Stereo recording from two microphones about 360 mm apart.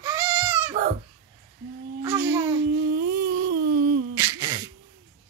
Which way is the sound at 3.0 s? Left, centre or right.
Right.